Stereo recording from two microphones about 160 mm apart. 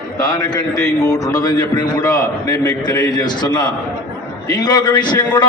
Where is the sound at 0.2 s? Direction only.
25° left (ahead or behind).